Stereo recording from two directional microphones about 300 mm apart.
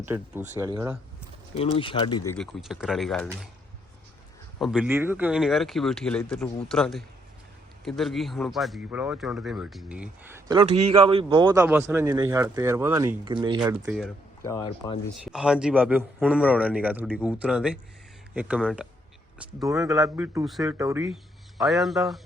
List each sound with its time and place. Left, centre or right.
0.0 s speech: centre
1.5 s speech: centre
2.4 s a man's voice: centre
4.6 s a man's voice: centre
13.8 s a man's voice: centre
15.2 s a man's voice: centre